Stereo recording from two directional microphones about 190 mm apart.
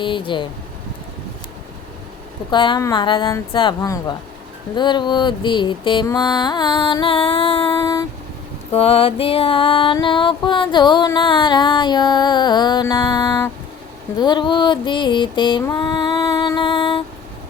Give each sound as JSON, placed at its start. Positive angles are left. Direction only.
{"t": 0.0, "sound": "music", "side_deg": 25}
{"t": 2.5, "sound": "music", "side_deg": 25}
{"t": 8.7, "sound": "music", "side_deg": 30}
{"t": 15.6, "sound": "female singing", "side_deg": 20}